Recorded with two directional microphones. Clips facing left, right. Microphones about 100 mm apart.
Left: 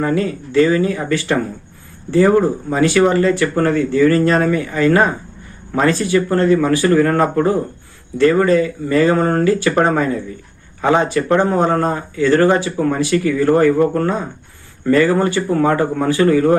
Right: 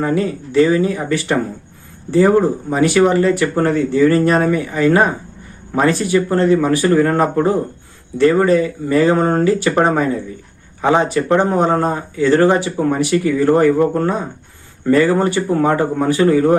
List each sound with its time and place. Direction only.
0.0 s speech: 20° right (ahead or behind)